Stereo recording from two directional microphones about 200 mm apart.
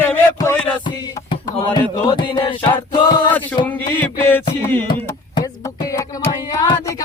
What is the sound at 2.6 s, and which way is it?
Music, 25° left (ahead or behind).